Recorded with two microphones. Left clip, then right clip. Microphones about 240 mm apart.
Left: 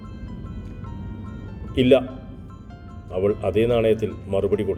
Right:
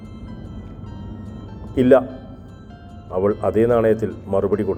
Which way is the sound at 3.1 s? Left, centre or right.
Centre.